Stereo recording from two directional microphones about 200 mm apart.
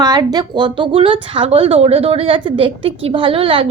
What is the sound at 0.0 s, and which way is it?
A woman's voice, 20° right (ahead or behind).